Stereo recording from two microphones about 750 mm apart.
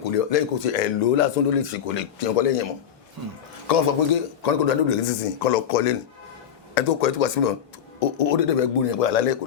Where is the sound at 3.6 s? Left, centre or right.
Left.